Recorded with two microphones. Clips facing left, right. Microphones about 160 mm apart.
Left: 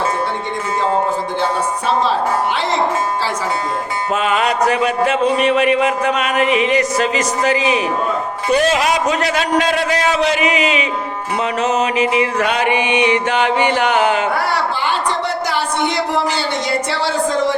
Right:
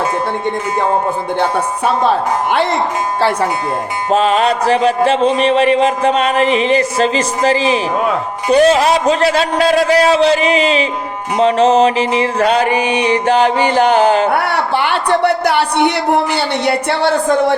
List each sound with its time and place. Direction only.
1.4 s a woman's voice: 60° right (ahead or behind)
4.1 s a sound: 30° right (ahead or behind)
14.3 s a woman's voice: 60° right (ahead or behind)